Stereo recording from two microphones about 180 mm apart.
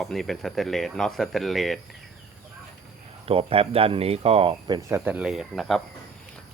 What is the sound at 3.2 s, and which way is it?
Speech, 30° right (ahead or behind).